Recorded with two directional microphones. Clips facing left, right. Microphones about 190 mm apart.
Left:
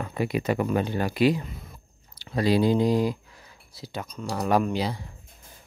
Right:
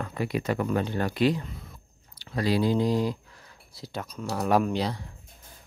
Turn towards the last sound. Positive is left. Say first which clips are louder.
# even
turn(degrees=5)  # may be behind; listen again after turning